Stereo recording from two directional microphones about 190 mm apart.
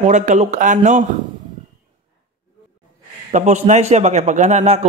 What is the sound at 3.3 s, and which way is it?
A man's voice, 35° right (ahead or behind).